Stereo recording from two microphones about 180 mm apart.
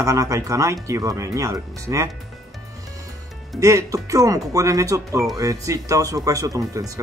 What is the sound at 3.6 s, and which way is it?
Speech, 15° right (ahead or behind).